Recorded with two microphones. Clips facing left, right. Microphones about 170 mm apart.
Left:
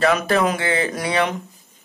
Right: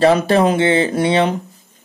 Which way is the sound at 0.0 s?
30° right (ahead or behind).